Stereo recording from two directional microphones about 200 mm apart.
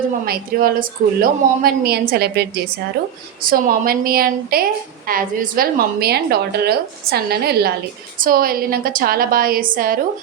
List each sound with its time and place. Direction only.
0.3 s a woman's voice: 45° right (ahead or behind)